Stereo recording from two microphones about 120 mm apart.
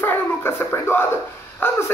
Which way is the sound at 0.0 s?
20° left (ahead or behind).